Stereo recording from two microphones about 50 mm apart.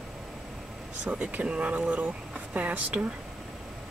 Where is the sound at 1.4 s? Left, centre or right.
Right.